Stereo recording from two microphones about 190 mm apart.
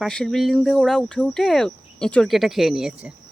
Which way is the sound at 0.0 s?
Centre (ahead or behind).